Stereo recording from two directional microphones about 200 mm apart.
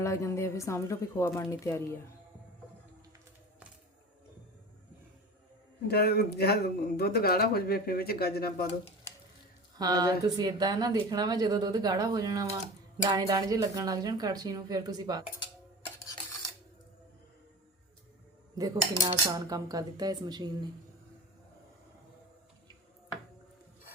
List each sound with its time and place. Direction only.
0.0 s a woman's voice: 15° left (ahead or behind)
5.9 s speech: 50° left (ahead or behind)
9.7 s speech: 20° right (ahead or behind)
18.5 s speech: 20° right (ahead or behind)